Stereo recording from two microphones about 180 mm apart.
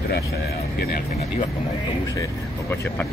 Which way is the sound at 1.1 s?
35° left (ahead or behind).